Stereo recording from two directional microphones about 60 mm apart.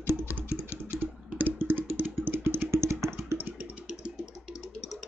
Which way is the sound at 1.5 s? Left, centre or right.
Right.